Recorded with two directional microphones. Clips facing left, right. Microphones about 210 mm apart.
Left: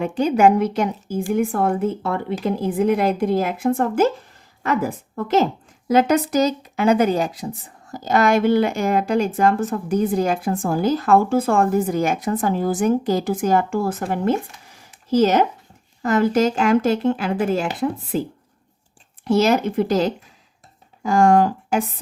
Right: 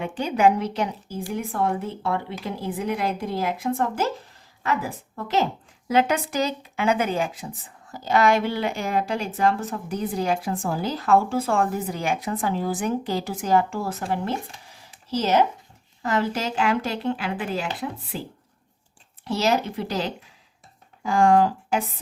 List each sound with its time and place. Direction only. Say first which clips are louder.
0.0 s a woman's voice: left 5 dB; 40° left (ahead or behind)
19.2 s a woman's voice: left 6 dB; 50° left (ahead or behind)